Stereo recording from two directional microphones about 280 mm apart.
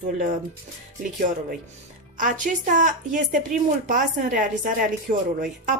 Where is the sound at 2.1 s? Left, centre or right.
Right.